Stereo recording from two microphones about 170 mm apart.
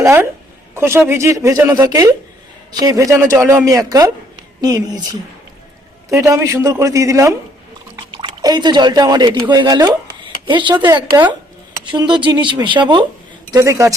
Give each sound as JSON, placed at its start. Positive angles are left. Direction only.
{"t": 0.0, "sound": "a woman's voice", "side_deg": -15}
{"t": 6.1, "sound": "speech", "side_deg": -20}
{"t": 13.5, "sound": "speech", "side_deg": -15}